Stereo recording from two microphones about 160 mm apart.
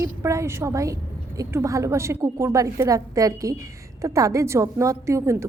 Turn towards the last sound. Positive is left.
turn(degrees=-20)  # may be behind; listen again after turning